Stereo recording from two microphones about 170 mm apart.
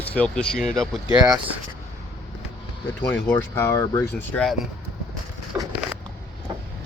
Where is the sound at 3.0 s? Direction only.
10° left (ahead or behind).